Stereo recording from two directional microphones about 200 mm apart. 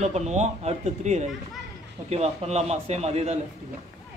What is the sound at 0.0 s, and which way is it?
A man's voice, 35° right (ahead or behind).